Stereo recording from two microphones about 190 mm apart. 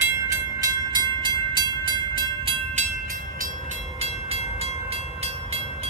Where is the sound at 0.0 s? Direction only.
15° right (ahead or behind).